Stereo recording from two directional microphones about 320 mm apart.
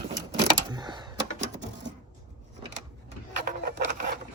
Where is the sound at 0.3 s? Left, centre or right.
Centre.